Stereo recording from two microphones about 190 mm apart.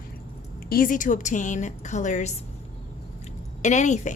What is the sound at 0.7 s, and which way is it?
A woman's voice, 45° left (ahead or behind).